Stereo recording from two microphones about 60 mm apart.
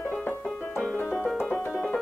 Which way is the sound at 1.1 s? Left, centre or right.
Centre.